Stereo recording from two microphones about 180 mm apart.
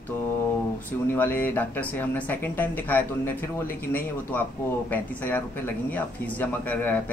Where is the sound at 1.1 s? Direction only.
10° left (ahead or behind).